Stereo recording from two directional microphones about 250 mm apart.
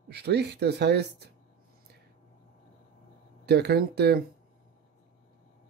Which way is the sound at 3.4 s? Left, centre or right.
Right.